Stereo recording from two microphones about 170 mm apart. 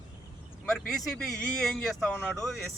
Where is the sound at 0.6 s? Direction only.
5° left (ahead or behind).